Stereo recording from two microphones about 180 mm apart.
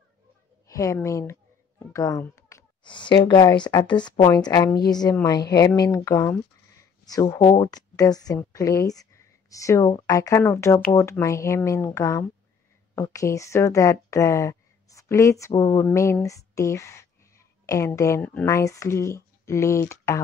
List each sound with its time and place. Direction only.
0.7 s a child's voice: 15° left (ahead or behind)